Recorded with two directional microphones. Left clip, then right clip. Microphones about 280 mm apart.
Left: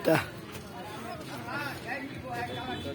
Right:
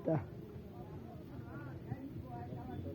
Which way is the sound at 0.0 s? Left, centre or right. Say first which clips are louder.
Left 12 dB; centre.